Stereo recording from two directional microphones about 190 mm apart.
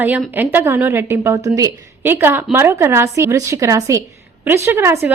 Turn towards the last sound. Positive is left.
turn(degrees=-10)  # may be behind; listen again after turning